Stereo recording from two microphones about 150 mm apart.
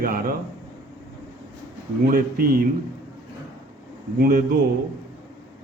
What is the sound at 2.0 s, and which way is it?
Speech, 85° right.